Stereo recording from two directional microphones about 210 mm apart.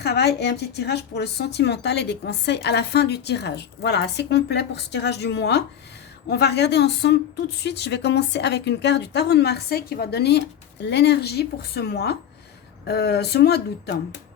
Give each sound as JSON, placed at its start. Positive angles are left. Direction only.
{"t": 0.0, "sound": "a woman's voice", "side_deg": 50}